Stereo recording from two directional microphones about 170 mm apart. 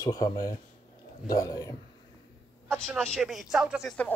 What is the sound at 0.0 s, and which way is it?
Speech, 20° left (ahead or behind).